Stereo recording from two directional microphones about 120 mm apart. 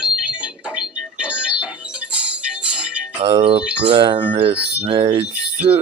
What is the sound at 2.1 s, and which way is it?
Music, 10° right (ahead or behind).